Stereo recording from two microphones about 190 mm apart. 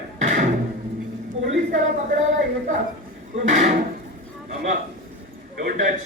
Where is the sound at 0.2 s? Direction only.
40° right (ahead or behind).